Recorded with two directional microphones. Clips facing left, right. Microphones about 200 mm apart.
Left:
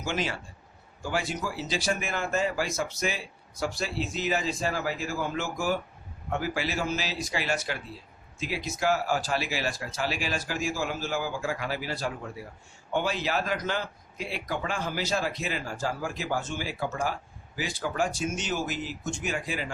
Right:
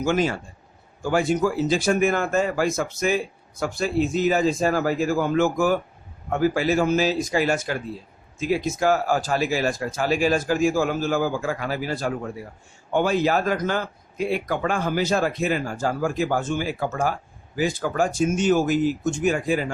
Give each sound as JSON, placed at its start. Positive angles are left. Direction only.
{"t": 0.0, "sound": "speech", "side_deg": -45}